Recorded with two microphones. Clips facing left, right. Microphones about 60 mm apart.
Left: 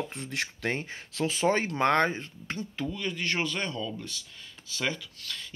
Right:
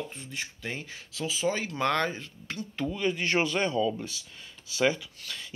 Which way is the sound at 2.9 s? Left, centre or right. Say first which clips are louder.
Right 6 dB; centre.